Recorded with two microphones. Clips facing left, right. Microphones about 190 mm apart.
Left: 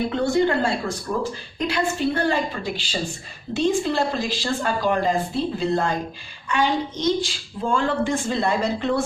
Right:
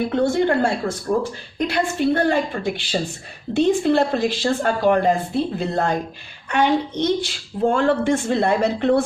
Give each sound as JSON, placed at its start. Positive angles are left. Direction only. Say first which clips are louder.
{"t": 0.1, "sound": "a woman's voice", "louder": "right 2 dB", "side_deg": -55}